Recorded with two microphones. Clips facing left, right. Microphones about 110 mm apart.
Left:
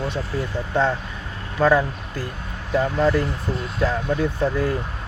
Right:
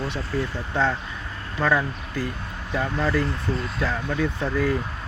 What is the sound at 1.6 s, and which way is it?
Speech, 35° left (ahead or behind).